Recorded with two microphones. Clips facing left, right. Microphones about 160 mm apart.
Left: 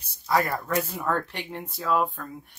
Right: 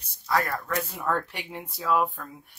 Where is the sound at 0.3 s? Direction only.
15° left (ahead or behind).